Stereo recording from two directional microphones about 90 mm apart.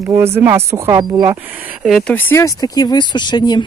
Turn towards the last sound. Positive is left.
turn(degrees=55)  # may be behind; listen again after turning